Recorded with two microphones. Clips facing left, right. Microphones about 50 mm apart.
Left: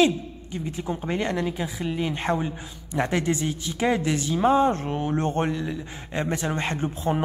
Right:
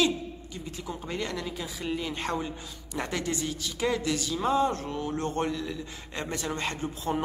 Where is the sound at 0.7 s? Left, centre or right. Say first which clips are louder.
Left 6 dB; left.